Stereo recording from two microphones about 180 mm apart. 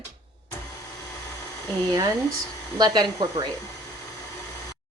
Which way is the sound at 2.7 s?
20° right (ahead or behind).